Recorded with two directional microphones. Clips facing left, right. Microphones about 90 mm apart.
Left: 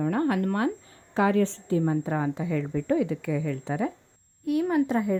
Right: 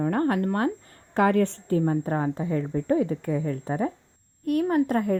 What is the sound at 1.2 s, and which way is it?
Speech, 55° right (ahead or behind).